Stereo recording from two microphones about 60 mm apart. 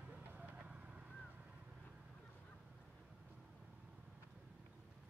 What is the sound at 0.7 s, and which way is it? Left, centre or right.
Vehicle, centre.